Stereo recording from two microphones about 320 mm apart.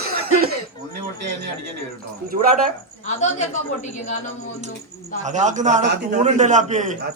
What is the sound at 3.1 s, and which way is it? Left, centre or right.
Speech, left.